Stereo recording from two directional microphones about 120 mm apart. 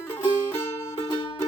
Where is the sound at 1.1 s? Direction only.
40° left (ahead or behind).